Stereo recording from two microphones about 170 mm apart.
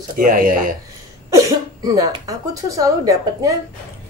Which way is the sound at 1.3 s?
20° right (ahead or behind).